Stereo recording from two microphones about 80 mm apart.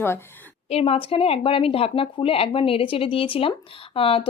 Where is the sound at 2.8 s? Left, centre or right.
Left.